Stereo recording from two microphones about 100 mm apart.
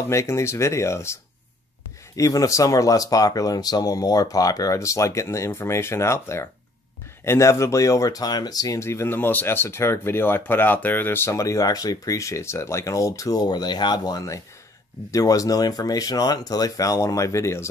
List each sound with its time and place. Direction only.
0.1 s speech: 30° left (ahead or behind)